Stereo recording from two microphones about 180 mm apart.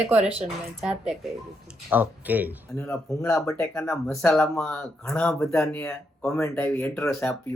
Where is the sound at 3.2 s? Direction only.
15° left (ahead or behind).